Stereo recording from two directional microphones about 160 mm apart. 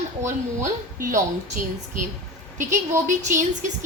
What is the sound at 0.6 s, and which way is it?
A woman's voice, 55° right (ahead or behind).